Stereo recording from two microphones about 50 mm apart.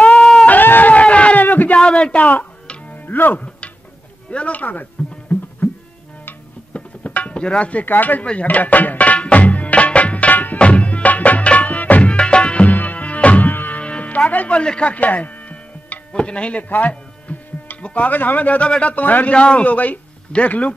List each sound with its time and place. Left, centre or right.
0.1 s a sound: centre
0.5 s a sound: left
1.8 s speech: centre; by 3.4 s left
4.3 s a man's voice: left
6.7 s music: left
7.8 s speech: left
8.3 s music: left
14.6 s a man's voice: left
19.3 s a man's voice: left